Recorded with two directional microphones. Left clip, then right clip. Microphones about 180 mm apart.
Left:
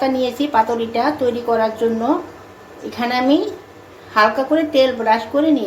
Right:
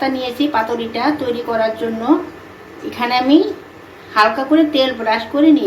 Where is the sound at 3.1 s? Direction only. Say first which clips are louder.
Right 3 dB; 35° left (ahead or behind).